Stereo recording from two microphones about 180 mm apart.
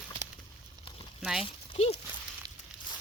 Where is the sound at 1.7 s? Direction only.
35° left (ahead or behind).